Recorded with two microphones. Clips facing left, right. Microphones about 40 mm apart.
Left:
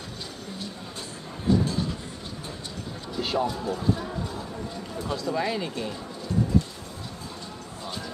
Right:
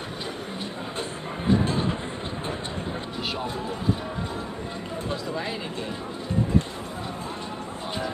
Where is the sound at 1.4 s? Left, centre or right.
Right.